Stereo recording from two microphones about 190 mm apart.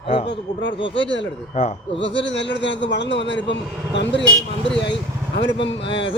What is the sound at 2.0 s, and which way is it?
A man's voice, 70° left (ahead or behind).